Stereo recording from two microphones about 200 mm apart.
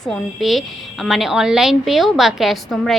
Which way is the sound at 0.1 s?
Centre (ahead or behind).